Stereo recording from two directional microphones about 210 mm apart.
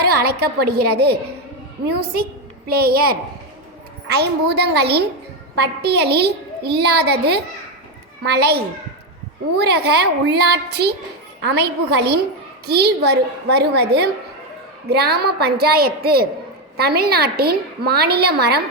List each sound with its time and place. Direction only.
0.0 s a woman's voice: 50° right (ahead or behind)
2.6 s a woman's voice: 45° right (ahead or behind)